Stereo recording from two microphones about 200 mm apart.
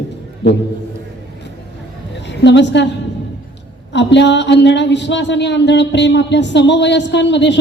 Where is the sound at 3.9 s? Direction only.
60° left (ahead or behind).